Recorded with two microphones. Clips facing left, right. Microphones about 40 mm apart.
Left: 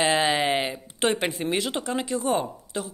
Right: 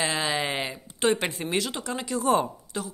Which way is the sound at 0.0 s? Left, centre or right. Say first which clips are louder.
Left 5 dB; left.